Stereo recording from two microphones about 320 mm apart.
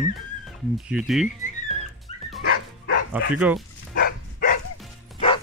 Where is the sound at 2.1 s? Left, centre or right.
Right.